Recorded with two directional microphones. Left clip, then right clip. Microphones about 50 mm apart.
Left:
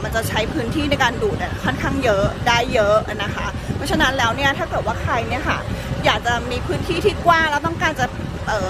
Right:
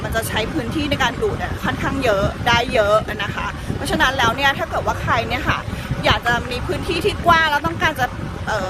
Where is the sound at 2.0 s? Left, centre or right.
Centre.